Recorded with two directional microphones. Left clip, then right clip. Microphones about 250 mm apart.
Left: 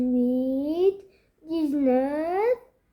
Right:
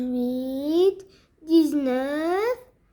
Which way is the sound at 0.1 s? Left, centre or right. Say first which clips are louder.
Left 3 dB; right.